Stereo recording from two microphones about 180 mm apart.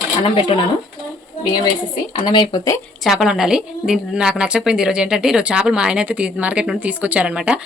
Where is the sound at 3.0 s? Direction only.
5° right (ahead or behind).